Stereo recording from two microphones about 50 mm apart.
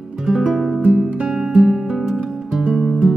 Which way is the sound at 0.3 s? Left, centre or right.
Centre.